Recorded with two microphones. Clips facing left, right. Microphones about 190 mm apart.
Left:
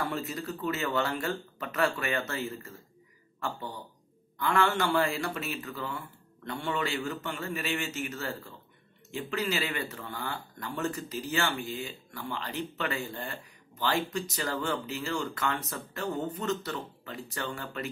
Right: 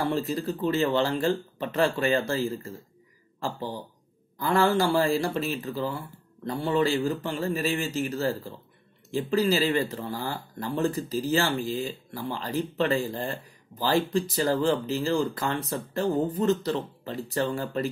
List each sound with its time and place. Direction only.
0.0 s speech: 30° right (ahead or behind)